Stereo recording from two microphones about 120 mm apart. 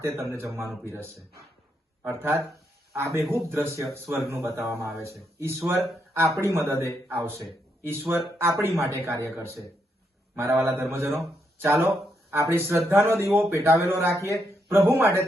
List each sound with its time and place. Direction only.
0.0 s a man's voice: 25° right (ahead or behind)